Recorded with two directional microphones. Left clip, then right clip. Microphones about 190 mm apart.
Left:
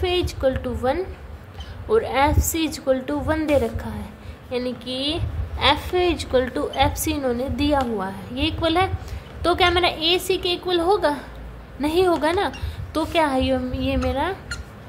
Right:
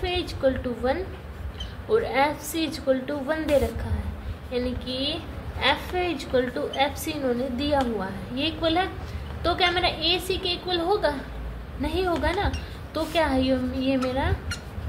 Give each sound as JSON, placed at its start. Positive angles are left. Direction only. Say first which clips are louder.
{"t": 0.0, "sound": "a woman's voice", "louder": "left 3 dB", "side_deg": 40}